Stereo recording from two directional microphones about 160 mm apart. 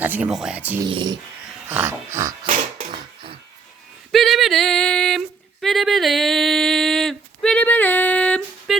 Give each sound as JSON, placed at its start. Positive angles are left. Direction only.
{"t": 0.0, "sound": "speech", "side_deg": -10}
{"t": 0.8, "sound": "speech", "side_deg": -30}
{"t": 1.6, "sound": "dog", "side_deg": -15}
{"t": 2.9, "sound": "a sound", "side_deg": -30}
{"t": 4.1, "sound": "yodeling", "side_deg": 0}
{"t": 5.6, "sound": "a sound", "side_deg": 0}